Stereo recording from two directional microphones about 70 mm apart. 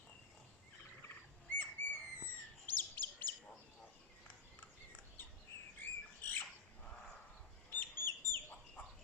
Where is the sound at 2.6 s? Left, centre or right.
Left.